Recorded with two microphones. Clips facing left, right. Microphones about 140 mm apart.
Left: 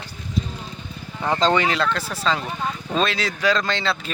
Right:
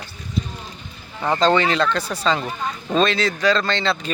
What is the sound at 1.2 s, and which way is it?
Speech, centre (ahead or behind).